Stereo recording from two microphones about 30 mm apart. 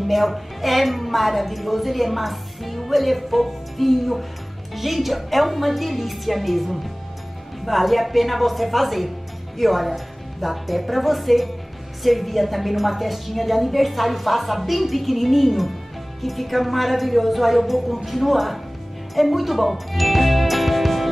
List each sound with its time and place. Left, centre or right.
0.0 s a woman's voice: centre